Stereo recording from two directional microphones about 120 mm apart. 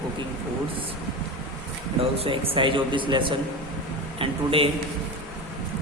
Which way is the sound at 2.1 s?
50° right (ahead or behind).